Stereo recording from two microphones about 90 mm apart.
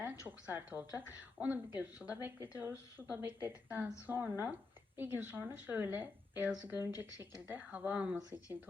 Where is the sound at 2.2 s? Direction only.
25° right (ahead or behind).